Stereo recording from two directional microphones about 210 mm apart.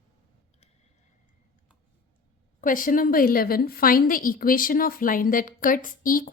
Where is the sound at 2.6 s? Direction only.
40° left (ahead or behind).